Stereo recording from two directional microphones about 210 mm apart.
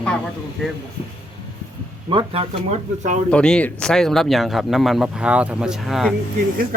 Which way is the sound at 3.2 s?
5° left (ahead or behind).